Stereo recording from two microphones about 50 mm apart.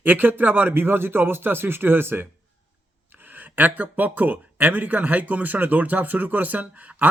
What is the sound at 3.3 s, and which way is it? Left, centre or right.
A man's voice, right.